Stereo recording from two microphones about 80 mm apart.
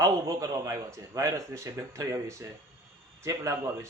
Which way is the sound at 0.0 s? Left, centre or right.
Right.